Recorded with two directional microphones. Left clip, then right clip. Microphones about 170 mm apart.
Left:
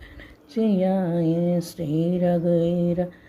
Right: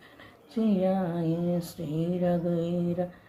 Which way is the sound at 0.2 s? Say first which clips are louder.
Left 6 dB; 35° left (ahead or behind).